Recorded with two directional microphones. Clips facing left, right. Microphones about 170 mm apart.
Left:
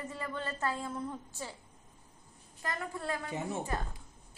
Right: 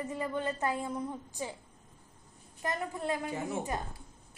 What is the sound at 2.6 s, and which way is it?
A woman's voice, 20° right (ahead or behind).